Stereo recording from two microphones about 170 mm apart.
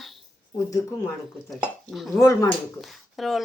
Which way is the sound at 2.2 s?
15° left (ahead or behind).